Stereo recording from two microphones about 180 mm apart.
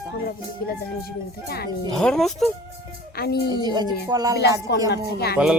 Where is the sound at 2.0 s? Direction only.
5° left (ahead or behind).